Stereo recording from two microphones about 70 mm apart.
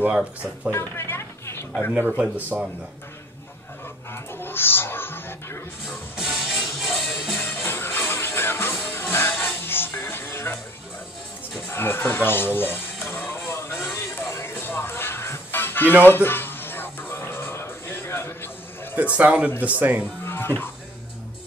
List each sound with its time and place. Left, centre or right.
0.7 s a sound: left
2.0 s a man's voice: centre
4.1 s music: left
5.9 s music: centre
7.3 s music: left
11.6 s speech: left
13.3 s a sound: left
14.3 s music: left
18.9 s a man's voice: right
20.2 s music: left